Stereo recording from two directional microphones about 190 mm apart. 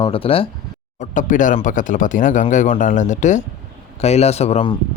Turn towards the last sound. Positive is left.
turn(degrees=35)  # may be behind; listen again after turning